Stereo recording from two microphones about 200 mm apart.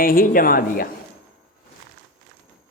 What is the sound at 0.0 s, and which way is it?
Speech, 45° left (ahead or behind).